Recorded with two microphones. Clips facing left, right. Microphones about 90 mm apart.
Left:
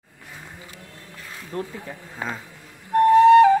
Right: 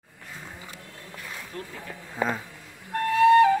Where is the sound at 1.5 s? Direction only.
30° left (ahead or behind).